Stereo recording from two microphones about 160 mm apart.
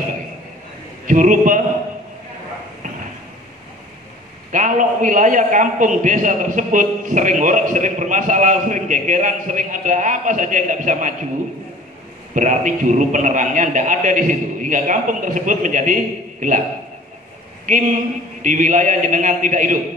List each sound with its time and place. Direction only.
1.0 s a man's voice: 55° right (ahead or behind)
4.5 s a man's voice: 50° right (ahead or behind)
12.4 s a man's voice: 50° right (ahead or behind)
17.6 s a man's voice: 55° right (ahead or behind)